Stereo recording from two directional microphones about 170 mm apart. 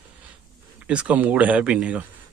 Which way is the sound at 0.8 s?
10° right (ahead or behind).